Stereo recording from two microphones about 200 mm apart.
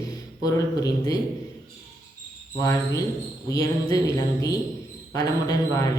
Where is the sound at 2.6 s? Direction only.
15° left (ahead or behind).